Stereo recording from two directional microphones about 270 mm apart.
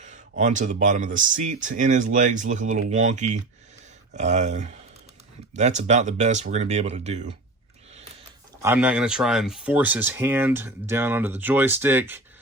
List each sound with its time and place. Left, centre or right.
0.0 s speech: right
8.6 s speech: centre